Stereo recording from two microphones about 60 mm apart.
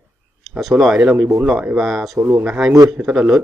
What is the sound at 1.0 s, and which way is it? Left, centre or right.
Speech, right.